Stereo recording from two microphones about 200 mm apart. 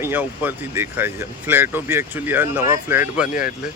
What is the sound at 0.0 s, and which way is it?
Speech, 10° right (ahead or behind).